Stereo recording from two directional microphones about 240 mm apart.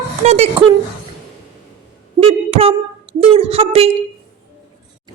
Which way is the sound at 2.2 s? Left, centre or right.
Right.